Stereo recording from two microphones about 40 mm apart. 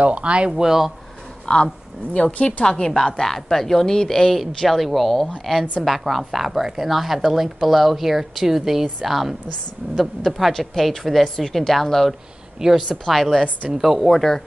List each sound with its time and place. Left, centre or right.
0.0 s speech: right
0.5 s speech: centre
1.5 s a woman's voice: left; by 5.9 s centre
6.0 s speech: centre
12.6 s speech: centre
12.9 s speech: centre